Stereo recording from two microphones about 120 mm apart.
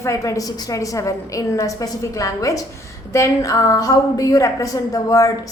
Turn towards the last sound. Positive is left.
turn(degrees=30)  # may be behind; listen again after turning